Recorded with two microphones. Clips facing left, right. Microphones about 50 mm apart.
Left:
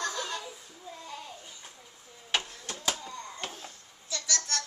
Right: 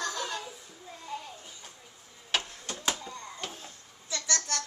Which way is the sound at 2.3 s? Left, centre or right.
Centre.